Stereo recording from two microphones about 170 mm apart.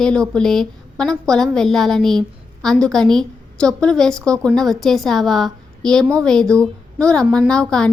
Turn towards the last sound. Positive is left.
turn(degrees=5)  # may be behind; listen again after turning